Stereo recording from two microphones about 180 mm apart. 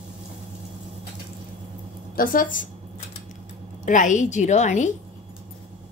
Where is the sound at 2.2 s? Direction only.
50° left (ahead or behind).